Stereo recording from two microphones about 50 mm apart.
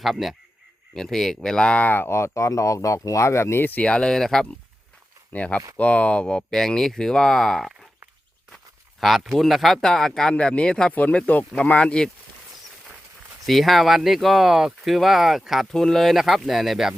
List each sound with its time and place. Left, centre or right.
0.0 s speech: centre
1.8 s speech: left
2.0 s speech: left
3.6 s speech: left
3.8 s speech: centre
5.3 s speech: left; by 9.8 s centre
9.8 s speech: centre
10.3 s speech: left
13.4 s speech: centre
15.7 s speech: centre